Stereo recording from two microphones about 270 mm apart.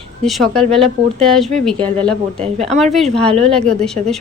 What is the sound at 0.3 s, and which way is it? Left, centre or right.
Speech, centre.